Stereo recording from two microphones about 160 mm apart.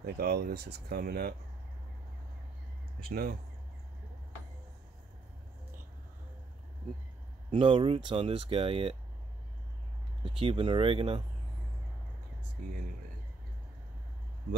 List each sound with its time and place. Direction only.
0.0 s speech: 70° right (ahead or behind)
3.0 s speech: 70° right (ahead or behind)
7.5 s speech: 30° right (ahead or behind)
10.2 s speech: 35° right (ahead or behind)